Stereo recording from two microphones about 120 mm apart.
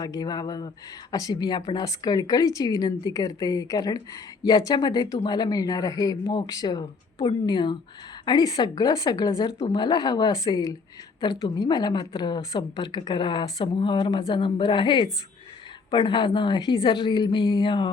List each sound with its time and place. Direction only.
0.0 s a woman's voice: 35° left (ahead or behind)